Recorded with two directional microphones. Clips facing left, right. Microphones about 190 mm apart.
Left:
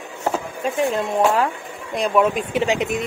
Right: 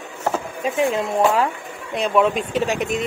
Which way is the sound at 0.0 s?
15° left (ahead or behind).